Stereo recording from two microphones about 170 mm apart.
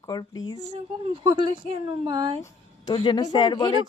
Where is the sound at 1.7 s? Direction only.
25° right (ahead or behind).